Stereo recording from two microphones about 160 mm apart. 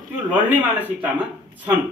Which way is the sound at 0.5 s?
10° right (ahead or behind).